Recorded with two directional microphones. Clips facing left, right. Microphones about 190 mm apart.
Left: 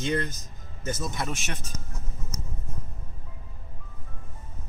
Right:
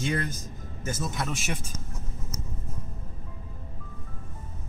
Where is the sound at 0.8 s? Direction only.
5° right (ahead or behind).